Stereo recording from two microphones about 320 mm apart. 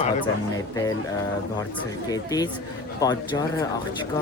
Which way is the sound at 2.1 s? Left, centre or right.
Centre.